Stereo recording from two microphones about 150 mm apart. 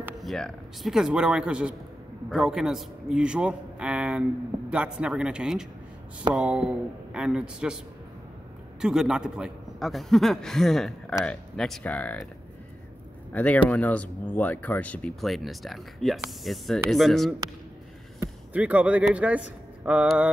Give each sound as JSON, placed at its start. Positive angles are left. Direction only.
{"t": 0.2, "sound": "a man's voice", "side_deg": 0}
{"t": 8.8, "sound": "a man's voice", "side_deg": -5}
{"t": 13.3, "sound": "a man's voice", "side_deg": 10}
{"t": 18.5, "sound": "speech", "side_deg": -10}